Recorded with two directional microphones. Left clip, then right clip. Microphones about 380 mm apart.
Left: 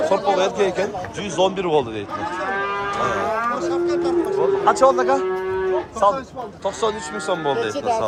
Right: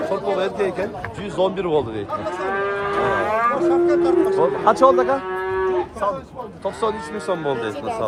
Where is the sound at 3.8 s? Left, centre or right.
Right.